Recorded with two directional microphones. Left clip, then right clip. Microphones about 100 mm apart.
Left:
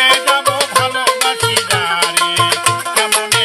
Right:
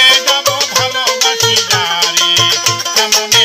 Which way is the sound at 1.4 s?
25° left (ahead or behind).